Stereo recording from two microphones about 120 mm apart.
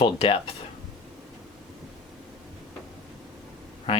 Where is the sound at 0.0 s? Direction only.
50° left (ahead or behind).